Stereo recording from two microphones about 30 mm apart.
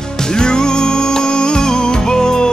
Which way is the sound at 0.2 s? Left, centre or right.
Left.